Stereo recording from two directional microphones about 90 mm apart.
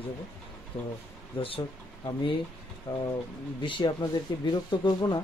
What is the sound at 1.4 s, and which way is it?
Speech, 90° left.